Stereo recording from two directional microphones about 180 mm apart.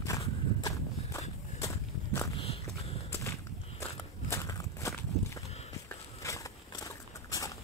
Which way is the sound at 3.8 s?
15° left (ahead or behind).